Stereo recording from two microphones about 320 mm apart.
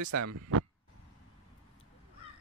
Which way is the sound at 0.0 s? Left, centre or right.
Right.